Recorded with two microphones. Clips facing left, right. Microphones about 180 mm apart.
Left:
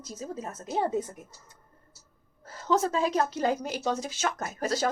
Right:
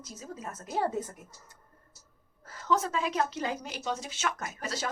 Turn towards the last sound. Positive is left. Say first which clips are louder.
# left 7 dB
turn(degrees=40)  # may be behind; listen again after turning